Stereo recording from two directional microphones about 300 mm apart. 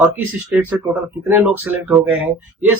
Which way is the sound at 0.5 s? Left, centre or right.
Centre.